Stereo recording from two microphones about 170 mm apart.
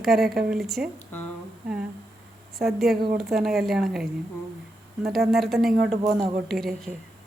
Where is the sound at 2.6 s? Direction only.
Centre (ahead or behind).